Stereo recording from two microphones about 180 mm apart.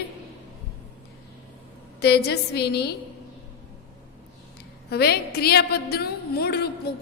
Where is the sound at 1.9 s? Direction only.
65° left (ahead or behind).